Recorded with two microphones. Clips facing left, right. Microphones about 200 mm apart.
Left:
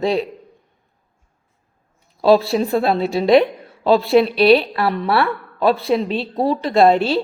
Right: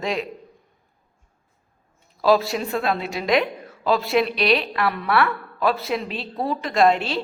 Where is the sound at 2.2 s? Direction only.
30° left (ahead or behind).